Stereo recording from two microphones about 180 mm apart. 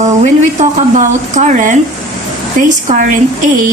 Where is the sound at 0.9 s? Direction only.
45° right (ahead or behind).